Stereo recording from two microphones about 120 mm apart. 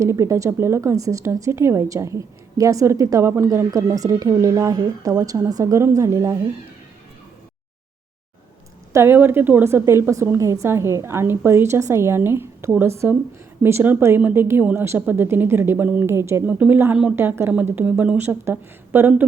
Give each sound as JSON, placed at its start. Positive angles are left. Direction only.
{"t": 0.0, "sound": "a woman's voice", "side_deg": -25}
{"t": 8.9, "sound": "a woman's voice", "side_deg": -20}